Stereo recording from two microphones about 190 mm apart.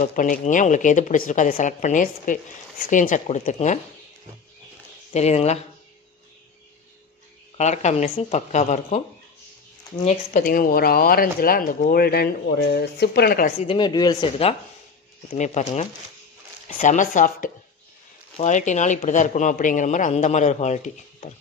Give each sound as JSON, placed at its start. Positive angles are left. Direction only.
{"t": 0.0, "sound": "speech", "side_deg": 45}
{"t": 5.1, "sound": "speech", "side_deg": 35}
{"t": 7.5, "sound": "speech", "side_deg": 35}
{"t": 10.0, "sound": "speech", "side_deg": 40}
{"t": 13.6, "sound": "speech", "side_deg": 25}
{"t": 15.3, "sound": "speech", "side_deg": 40}